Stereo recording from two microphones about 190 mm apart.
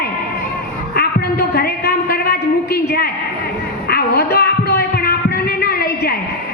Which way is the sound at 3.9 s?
55° left (ahead or behind).